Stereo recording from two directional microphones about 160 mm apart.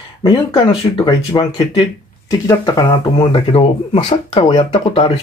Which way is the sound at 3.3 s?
35° left (ahead or behind).